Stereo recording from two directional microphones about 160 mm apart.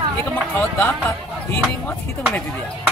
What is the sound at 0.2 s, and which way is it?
Speech, 15° left (ahead or behind).